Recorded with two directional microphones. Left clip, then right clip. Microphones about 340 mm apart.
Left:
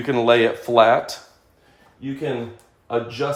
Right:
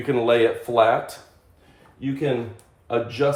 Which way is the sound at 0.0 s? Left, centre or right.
Left.